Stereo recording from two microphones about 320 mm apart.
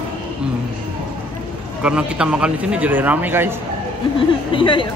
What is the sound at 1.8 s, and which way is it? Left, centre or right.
Speech, centre.